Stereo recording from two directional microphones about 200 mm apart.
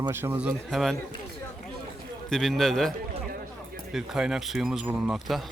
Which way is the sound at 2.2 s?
Centre (ahead or behind).